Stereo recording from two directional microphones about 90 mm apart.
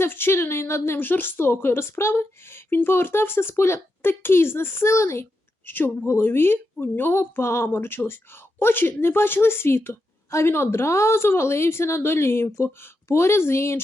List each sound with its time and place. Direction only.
0.0 s speech: 25° left (ahead or behind)
5.6 s speech: 20° left (ahead or behind)